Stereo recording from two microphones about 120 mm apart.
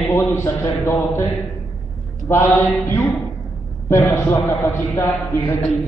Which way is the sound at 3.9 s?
25° left (ahead or behind).